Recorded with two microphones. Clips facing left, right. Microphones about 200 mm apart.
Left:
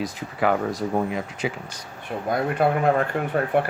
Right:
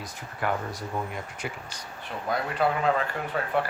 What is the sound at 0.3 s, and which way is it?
Speech, 90° left.